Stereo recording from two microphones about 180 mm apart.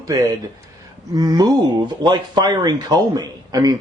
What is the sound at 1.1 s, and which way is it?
A man's voice, 20° right (ahead or behind).